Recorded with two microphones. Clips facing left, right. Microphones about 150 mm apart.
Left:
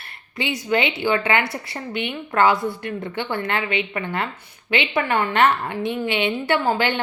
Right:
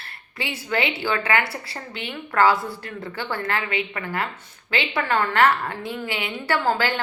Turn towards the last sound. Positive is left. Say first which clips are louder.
# left 2 dB
turn(degrees=20)  # may be behind; listen again after turning